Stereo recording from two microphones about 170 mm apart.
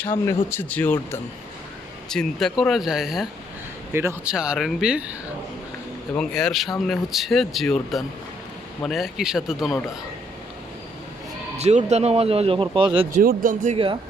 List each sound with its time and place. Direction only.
0.0 s speech: 15° left (ahead or behind)
2.0 s speech: 5° left (ahead or behind)
6.1 s speech: centre (ahead or behind)
11.5 s speech: 40° right (ahead or behind)
13.2 s speech: 55° right (ahead or behind)